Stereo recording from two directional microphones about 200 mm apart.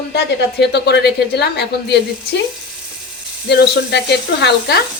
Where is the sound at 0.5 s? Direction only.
55° left (ahead or behind).